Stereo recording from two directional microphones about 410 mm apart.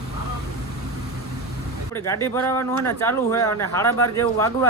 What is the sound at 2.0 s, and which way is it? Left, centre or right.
Speech, centre.